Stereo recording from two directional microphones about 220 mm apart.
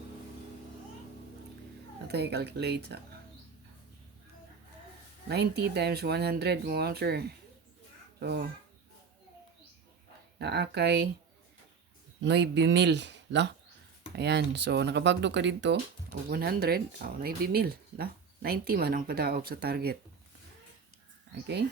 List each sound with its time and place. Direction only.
2.0 s speech: 50° right (ahead or behind)
5.3 s speech: 50° right (ahead or behind)
10.3 s speech: 50° right (ahead or behind)
12.2 s speech: 50° right (ahead or behind)